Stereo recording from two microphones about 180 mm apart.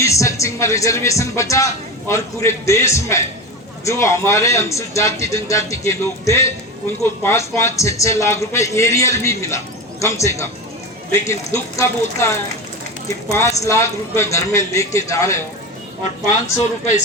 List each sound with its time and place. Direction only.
0.0 s speech: 15° left (ahead or behind)